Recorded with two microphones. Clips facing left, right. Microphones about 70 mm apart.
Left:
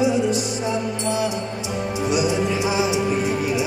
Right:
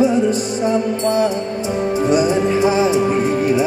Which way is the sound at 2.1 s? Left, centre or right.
Right.